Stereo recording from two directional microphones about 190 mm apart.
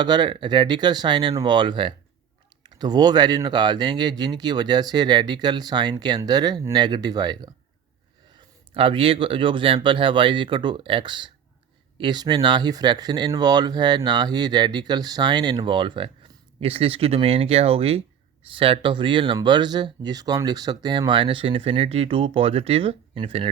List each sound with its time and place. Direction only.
0.0 s speech: 25° right (ahead or behind)